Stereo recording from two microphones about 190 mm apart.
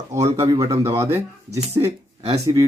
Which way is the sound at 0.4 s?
15° right (ahead or behind).